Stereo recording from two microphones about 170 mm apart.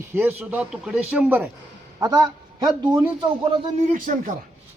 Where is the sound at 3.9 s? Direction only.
50° right (ahead or behind).